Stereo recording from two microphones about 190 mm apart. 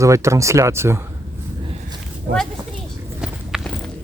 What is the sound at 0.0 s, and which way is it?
Speech, 15° right (ahead or behind).